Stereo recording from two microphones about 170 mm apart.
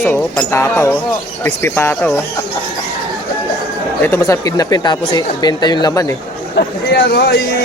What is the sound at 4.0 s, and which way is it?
Speech, 15° left (ahead or behind).